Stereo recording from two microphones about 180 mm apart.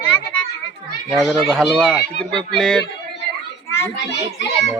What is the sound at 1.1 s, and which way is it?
Speech, centre (ahead or behind).